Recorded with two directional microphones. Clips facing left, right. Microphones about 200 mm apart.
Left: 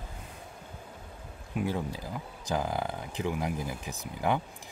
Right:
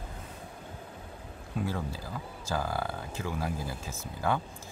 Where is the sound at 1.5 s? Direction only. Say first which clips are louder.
Left 2 dB; 15° left (ahead or behind).